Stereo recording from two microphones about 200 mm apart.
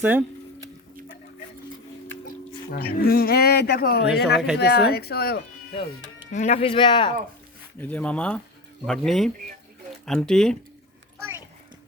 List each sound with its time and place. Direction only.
0.0 s a sound: 10° right (ahead or behind)
2.2 s speech: 50° left (ahead or behind)
6.3 s speech: 35° left (ahead or behind)
7.8 s speech: 5° left (ahead or behind)